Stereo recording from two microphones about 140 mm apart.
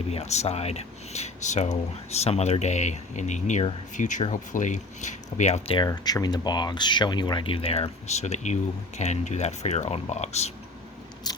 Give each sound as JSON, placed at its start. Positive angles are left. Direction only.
{"t": 0.1, "sound": "speech", "side_deg": 50}
{"t": 5.7, "sound": "speech", "side_deg": 30}